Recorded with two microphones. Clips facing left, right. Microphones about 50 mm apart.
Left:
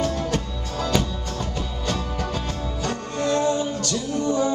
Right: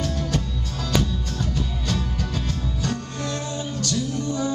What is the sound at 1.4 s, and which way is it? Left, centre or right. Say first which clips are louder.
Music: even; left.